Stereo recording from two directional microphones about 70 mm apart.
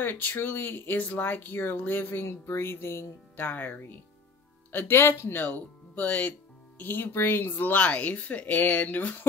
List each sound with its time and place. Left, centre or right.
0.0 s speech: left